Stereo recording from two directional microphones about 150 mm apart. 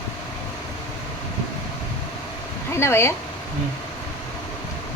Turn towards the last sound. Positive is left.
turn(degrees=15)  # may be behind; listen again after turning